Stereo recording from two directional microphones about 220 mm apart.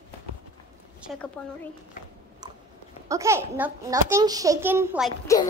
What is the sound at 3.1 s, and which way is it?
A child's voice, 15° right (ahead or behind).